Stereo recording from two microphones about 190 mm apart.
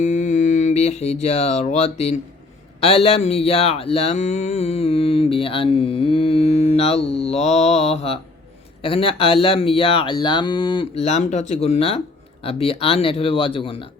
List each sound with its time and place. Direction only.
0.0 s speech: 40° left (ahead or behind)